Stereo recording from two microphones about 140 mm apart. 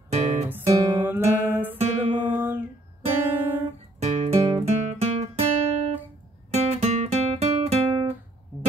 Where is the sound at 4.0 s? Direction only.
45° right (ahead or behind).